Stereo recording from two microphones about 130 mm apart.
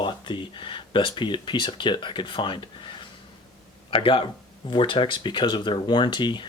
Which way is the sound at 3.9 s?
45° left (ahead or behind).